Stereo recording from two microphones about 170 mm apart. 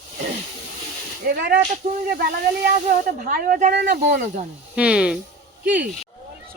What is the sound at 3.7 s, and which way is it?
Speech, 75° right (ahead or behind).